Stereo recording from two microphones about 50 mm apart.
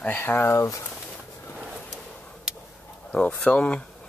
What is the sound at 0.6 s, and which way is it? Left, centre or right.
Speech, left.